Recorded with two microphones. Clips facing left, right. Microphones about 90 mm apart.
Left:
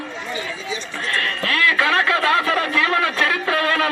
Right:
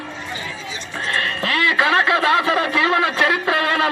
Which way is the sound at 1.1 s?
25° right (ahead or behind).